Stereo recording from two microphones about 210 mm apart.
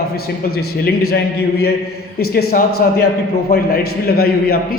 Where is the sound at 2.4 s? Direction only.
50° left (ahead or behind).